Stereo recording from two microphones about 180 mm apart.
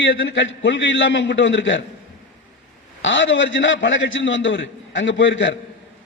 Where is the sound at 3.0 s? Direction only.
90° left.